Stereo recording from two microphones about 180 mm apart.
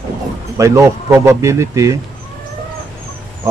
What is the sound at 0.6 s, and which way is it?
Speech, 15° right (ahead or behind).